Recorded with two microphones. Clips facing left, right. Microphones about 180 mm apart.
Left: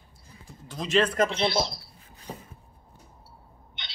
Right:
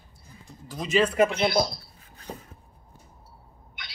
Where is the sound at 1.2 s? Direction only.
30° left (ahead or behind).